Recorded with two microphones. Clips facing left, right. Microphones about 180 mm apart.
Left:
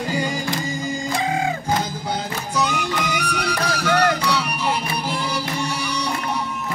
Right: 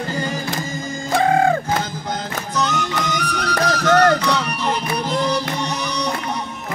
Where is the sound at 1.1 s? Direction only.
55° right (ahead or behind).